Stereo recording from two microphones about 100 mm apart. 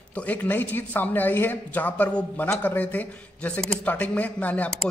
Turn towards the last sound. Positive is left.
turn(degrees=15)  # may be behind; listen again after turning